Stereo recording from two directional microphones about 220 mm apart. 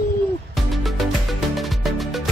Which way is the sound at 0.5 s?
Centre (ahead or behind).